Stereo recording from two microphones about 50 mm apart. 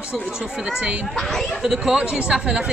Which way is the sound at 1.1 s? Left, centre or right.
Centre.